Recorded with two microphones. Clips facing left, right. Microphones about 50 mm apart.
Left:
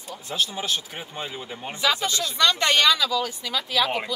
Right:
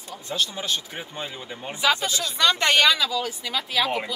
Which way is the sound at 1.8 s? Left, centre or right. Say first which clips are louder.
Right 1 dB; centre.